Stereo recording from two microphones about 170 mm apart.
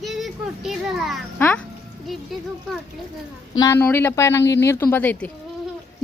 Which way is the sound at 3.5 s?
20° left (ahead or behind).